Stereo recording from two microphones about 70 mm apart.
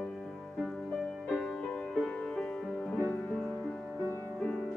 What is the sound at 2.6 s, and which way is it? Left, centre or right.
Music, centre.